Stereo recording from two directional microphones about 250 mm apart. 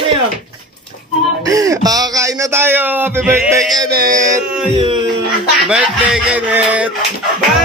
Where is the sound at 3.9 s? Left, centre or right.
Right.